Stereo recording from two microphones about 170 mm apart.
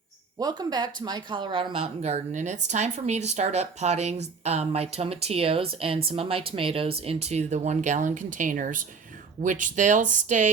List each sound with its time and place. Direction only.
0.3 s speech: 25° right (ahead or behind); by 10.5 s 45° right (ahead or behind)